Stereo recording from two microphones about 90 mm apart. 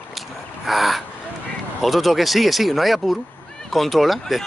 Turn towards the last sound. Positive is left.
turn(degrees=0)  # may be behind; listen again after turning